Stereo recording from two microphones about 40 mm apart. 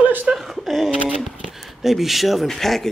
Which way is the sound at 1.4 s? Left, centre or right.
Centre.